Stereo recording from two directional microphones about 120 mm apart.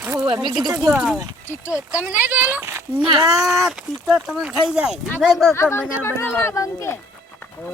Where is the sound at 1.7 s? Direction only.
10° right (ahead or behind).